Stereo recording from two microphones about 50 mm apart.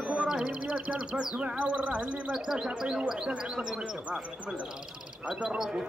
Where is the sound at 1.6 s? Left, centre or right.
Right.